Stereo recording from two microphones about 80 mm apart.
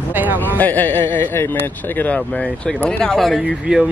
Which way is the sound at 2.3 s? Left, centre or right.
Centre.